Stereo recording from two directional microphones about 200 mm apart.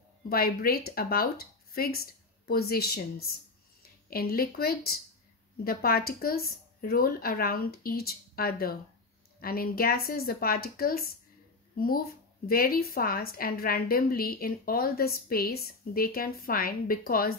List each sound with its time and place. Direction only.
0.3 s a woman's voice: 45° left (ahead or behind)